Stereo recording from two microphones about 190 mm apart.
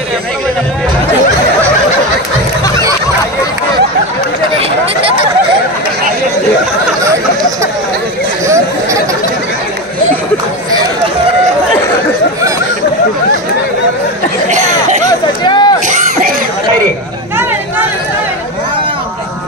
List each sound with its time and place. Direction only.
14.5 s chatter: 40° right (ahead or behind)
15.0 s a sound: 25° left (ahead or behind)
15.9 s cough: 50° right (ahead or behind)